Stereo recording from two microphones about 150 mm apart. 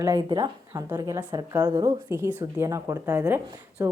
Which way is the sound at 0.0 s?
25° right (ahead or behind).